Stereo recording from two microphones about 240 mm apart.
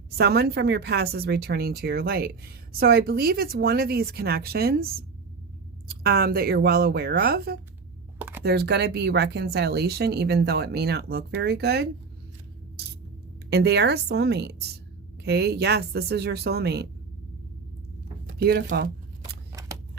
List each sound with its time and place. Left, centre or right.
0.2 s speech: right
8.2 s computer keyboard: centre
8.4 s speech: right
13.5 s speech: right
18.3 s speech: right